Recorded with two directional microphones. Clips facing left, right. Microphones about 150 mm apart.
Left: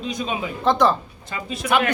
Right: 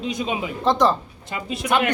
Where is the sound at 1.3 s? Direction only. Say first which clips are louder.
Right 1 dB; 25° right (ahead or behind).